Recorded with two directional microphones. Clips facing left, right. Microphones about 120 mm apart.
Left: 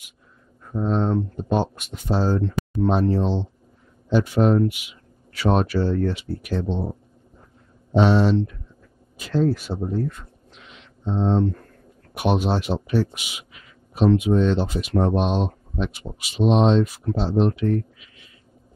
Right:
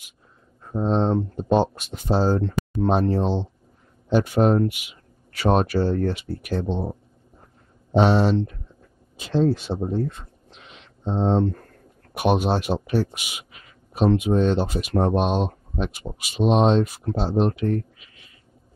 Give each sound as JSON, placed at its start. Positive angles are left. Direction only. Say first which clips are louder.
{"t": 0.7, "sound": "speech", "louder": "right 1 dB", "side_deg": -25}
{"t": 2.4, "sound": "speech", "louder": "left 1 dB", "side_deg": -50}
{"t": 6.6, "sound": "speech", "louder": "even", "side_deg": -15}
{"t": 8.1, "sound": "speech", "louder": "left 1 dB", "side_deg": -50}
{"t": 9.1, "sound": "speech", "louder": "right 1 dB", "side_deg": -25}
{"t": 12.1, "sound": "speech", "louder": "right 1 dB", "side_deg": -50}
{"t": 15.2, "sound": "speech", "louder": "even", "side_deg": -10}
{"t": 15.8, "sound": "speech", "louder": "even", "side_deg": -50}
{"t": 17.1, "sound": "speech", "louder": "even", "side_deg": -15}
{"t": 17.4, "sound": "speech", "louder": "left 1 dB", "side_deg": -45}